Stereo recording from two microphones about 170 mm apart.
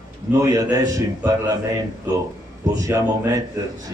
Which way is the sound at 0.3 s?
20° right (ahead or behind).